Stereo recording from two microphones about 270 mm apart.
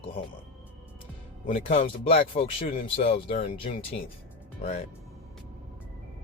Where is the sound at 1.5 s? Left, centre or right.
Centre.